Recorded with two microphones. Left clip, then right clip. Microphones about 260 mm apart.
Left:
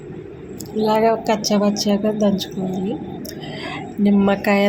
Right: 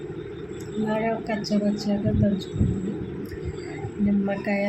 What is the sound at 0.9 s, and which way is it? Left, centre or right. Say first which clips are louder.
A woman's voice: left 10 dB; left.